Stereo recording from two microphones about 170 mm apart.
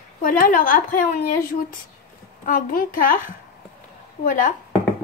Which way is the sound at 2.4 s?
55° left (ahead or behind).